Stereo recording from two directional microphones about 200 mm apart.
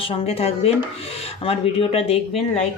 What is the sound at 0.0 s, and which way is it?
Speech, 30° left (ahead or behind).